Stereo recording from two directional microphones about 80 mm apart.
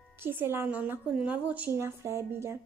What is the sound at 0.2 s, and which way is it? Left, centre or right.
A woman's voice, right.